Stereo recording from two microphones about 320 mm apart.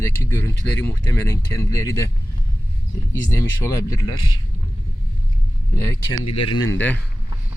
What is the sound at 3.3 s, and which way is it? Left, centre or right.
Speech, centre.